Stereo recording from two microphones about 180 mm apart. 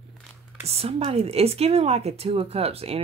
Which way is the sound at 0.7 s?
35° right (ahead or behind).